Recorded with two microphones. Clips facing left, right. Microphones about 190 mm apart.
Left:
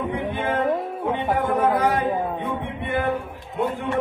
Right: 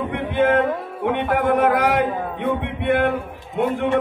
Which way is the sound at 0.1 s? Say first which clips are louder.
Right 6 dB; 75° right (ahead or behind).